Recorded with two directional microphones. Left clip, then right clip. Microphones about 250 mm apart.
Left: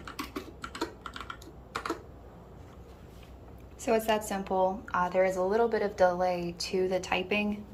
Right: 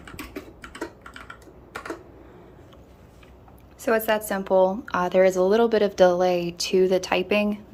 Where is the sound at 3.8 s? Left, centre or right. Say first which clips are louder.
Right 5 dB; centre.